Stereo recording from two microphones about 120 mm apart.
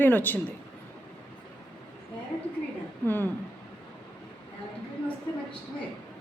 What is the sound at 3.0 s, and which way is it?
Speech, 15° left (ahead or behind).